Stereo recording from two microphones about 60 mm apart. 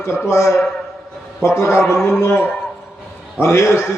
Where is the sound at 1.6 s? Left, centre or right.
Left.